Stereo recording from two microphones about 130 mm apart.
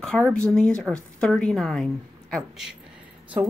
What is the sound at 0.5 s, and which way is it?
A woman's voice, 5° left (ahead or behind).